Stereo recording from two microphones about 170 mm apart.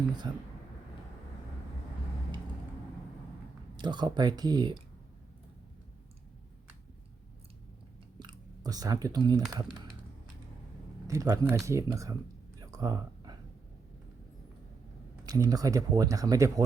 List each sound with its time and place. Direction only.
0.2 s speech: 30° right (ahead or behind)
3.8 s speech: 25° right (ahead or behind)
8.2 s speech: 25° right (ahead or behind)
11.0 s speech: 20° right (ahead or behind)
12.5 s a sound: 20° right (ahead or behind)
15.3 s speech: 20° right (ahead or behind)